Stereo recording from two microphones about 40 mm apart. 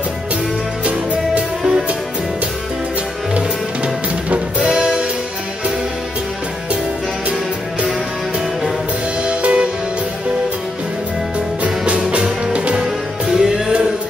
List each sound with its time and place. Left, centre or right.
1.6 s music: centre
3.3 s music: right
9.2 s music: right
11.3 s music: right
12.8 s music: centre